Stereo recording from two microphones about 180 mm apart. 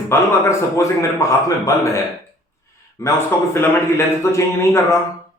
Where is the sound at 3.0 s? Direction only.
15° left (ahead or behind).